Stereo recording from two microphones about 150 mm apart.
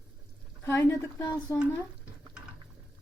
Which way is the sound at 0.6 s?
20° left (ahead or behind).